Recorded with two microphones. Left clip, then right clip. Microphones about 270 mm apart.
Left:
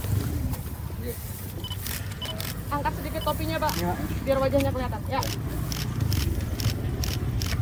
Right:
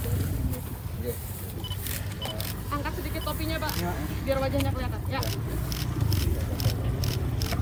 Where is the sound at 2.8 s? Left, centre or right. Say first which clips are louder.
Left 5 dB; left.